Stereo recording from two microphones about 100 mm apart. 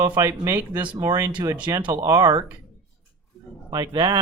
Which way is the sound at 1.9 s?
35° right (ahead or behind).